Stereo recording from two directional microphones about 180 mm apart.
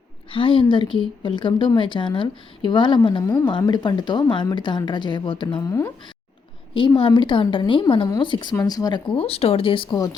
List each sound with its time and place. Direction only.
0.3 s a woman's voice: 30° left (ahead or behind)
3.2 s a woman's voice: 15° left (ahead or behind)